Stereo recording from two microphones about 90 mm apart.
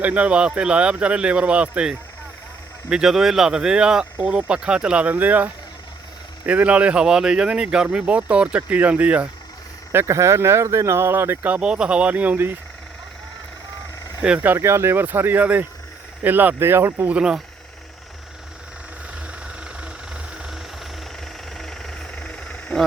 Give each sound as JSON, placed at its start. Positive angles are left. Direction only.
{"t": 0.0, "sound": "speech", "side_deg": -15}
{"t": 9.9, "sound": "speech", "side_deg": -30}
{"t": 14.2, "sound": "speech", "side_deg": -15}
{"t": 17.1, "sound": "speech", "side_deg": -10}
{"t": 19.3, "sound": "vehicle", "side_deg": -10}
{"t": 21.6, "sound": "vehicle", "side_deg": 5}